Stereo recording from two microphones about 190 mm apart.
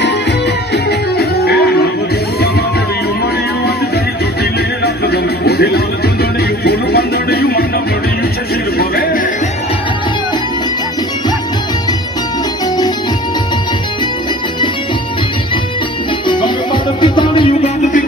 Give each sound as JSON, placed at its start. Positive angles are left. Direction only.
{"t": 0.8, "sound": "music", "side_deg": 55}
{"t": 4.8, "sound": "music", "side_deg": 55}
{"t": 8.7, "sound": "a sound", "side_deg": 55}
{"t": 16.3, "sound": "music", "side_deg": 25}